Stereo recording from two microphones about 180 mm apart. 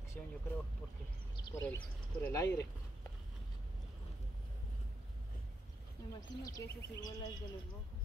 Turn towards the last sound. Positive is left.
turn(degrees=20)  # may be behind; listen again after turning